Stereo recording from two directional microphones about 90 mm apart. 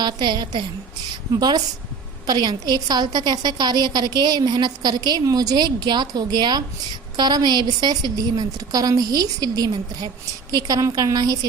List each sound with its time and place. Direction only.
0.0 s a woman's voice: 55° right (ahead or behind)